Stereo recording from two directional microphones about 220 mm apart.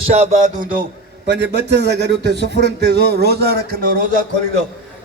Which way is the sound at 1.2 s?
50° right (ahead or behind).